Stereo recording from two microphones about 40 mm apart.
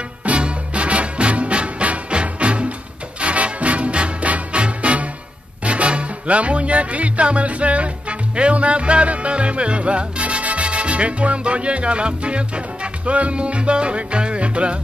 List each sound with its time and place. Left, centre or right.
0.2 s music: right